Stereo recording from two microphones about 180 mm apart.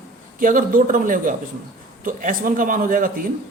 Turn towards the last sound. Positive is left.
turn(degrees=-50)  # may be behind; listen again after turning